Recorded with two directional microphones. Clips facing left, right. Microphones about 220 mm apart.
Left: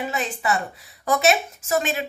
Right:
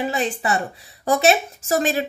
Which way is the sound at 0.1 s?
30° right (ahead or behind).